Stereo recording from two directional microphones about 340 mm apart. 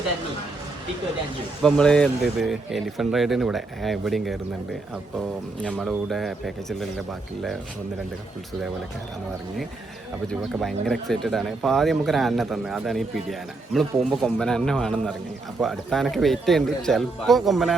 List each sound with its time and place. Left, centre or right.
1.6 s speech: centre
10.4 s speech: centre